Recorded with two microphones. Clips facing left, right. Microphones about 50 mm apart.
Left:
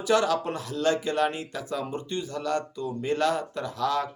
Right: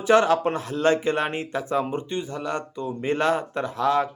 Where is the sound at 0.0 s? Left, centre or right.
Right.